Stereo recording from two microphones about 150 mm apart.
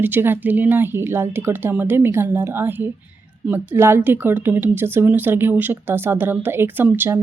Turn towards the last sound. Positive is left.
turn(degrees=-15)  # may be behind; listen again after turning